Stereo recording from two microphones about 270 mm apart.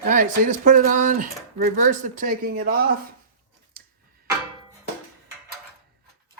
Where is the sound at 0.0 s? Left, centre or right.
Right.